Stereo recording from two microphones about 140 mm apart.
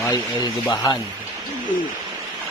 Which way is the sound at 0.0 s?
25° left (ahead or behind).